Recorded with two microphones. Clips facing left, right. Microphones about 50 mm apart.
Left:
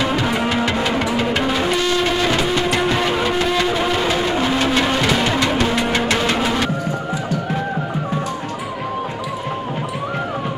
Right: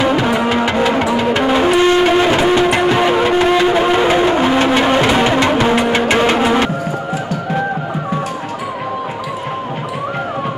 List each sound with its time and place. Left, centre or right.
0.0 s music: centre